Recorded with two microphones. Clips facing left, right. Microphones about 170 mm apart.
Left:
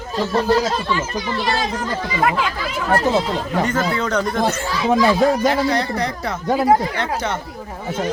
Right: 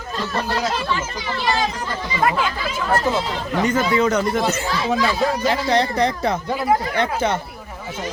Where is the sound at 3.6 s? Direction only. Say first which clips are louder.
Right 3 dB; 10° right (ahead or behind).